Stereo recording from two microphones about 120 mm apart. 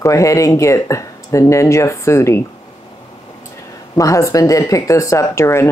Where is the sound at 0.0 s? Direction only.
25° left (ahead or behind).